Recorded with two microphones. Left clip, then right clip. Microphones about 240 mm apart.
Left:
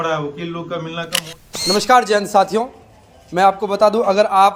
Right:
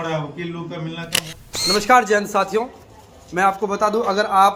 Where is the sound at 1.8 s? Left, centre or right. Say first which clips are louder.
Left 2 dB; left.